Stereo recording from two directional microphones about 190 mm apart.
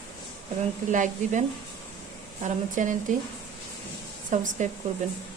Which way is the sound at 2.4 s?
40° right (ahead or behind).